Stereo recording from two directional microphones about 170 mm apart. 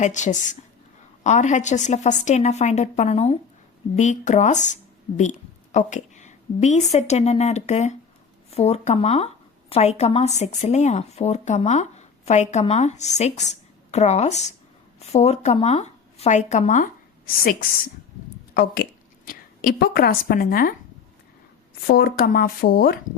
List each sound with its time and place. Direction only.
0.0 s a woman's voice: 45° left (ahead or behind)
21.8 s speech: 60° left (ahead or behind)